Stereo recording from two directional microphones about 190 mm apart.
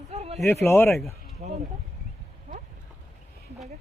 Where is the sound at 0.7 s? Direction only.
15° left (ahead or behind).